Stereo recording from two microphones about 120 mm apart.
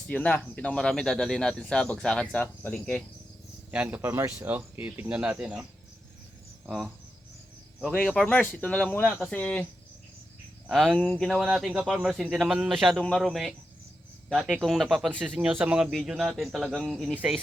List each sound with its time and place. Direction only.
0.1 s speech: 10° left (ahead or behind)
3.7 s speech: 10° right (ahead or behind)
6.7 s speech: centre (ahead or behind)
7.8 s speech: 10° left (ahead or behind)
10.7 s speech: centre (ahead or behind)